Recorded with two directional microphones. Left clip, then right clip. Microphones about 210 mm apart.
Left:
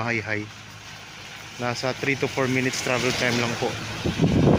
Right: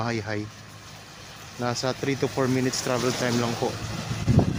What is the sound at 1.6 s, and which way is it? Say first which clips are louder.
Speech: left 1 dB; 20° right (ahead or behind).